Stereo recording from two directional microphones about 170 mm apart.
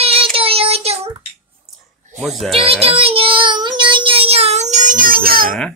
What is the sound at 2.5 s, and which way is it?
Child singing, 35° right (ahead or behind).